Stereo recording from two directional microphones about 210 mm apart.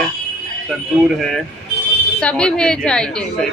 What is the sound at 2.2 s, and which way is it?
A woman's voice, 5° left (ahead or behind).